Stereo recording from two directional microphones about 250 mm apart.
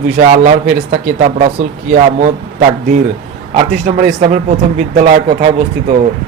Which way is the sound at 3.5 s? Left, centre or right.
Right.